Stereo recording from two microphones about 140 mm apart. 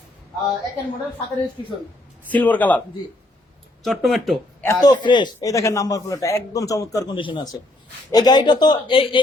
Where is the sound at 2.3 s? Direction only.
10° left (ahead or behind).